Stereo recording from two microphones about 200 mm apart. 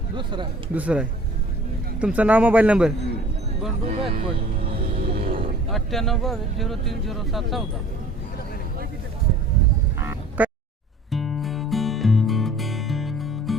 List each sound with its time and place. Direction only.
0.2 s speech: 25° right (ahead or behind)
0.7 s a man's voice: 5° right (ahead or behind)
3.8 s speech: 30° right (ahead or behind)
4.7 s music: 30° right (ahead or behind)
5.2 s cattle: 30° right (ahead or behind)
5.7 s speech: centre (ahead or behind)
10.0 s honk: 10° right (ahead or behind)
11.1 s music: centre (ahead or behind)